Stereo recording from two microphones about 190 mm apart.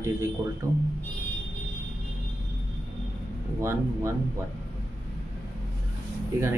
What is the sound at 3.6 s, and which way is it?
Speech, 15° right (ahead or behind).